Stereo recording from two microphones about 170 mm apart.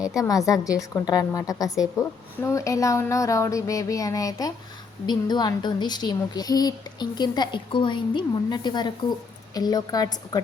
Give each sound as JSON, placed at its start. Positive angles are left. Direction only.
{"t": 0.2, "sound": "a woman's voice", "side_deg": 20}